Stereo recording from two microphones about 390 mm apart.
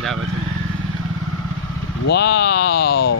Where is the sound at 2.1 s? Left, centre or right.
Left.